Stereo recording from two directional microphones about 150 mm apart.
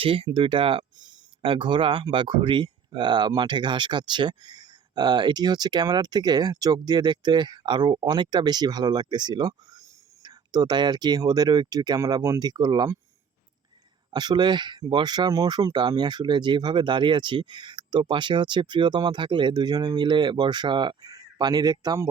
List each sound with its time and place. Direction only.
0.0 s speech: 35° right (ahead or behind)
14.1 s speech: 30° right (ahead or behind)